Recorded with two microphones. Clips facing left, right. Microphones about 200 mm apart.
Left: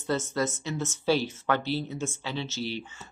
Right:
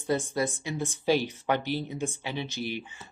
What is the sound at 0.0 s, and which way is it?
Speech, 15° right (ahead or behind).